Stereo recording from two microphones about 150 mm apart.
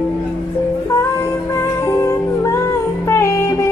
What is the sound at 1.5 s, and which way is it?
Music, 20° left (ahead or behind).